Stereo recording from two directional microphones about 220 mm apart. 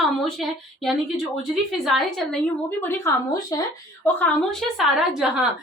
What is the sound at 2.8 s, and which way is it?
A woman's voice, 10° left (ahead or behind).